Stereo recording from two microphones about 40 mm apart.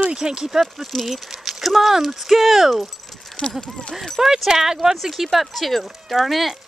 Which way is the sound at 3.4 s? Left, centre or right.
Left.